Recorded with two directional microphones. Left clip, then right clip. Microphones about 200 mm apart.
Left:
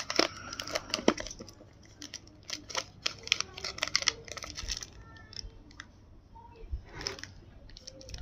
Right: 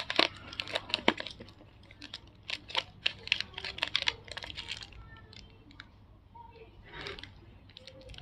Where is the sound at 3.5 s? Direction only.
20° left (ahead or behind).